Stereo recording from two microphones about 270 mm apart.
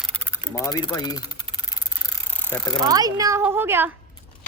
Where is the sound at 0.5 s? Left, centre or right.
Centre.